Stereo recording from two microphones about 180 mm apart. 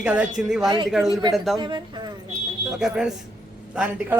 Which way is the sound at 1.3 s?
Centre (ahead or behind).